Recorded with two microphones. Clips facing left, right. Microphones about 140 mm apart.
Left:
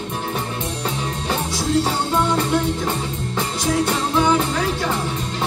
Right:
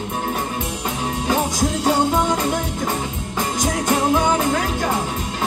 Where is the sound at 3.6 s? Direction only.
45° right (ahead or behind).